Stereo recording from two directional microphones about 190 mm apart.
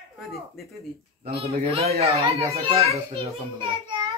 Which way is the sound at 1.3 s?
30° right (ahead or behind).